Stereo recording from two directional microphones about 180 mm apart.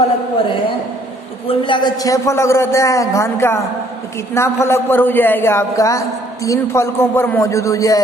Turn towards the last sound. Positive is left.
turn(degrees=20)  # may be behind; listen again after turning